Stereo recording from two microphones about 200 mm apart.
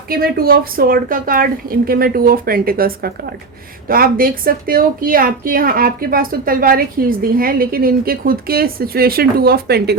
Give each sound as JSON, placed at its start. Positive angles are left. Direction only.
{"t": 0.1, "sound": "a woman's voice", "side_deg": -50}